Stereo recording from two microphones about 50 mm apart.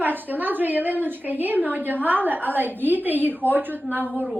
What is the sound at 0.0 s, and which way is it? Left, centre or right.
A woman's voice, right.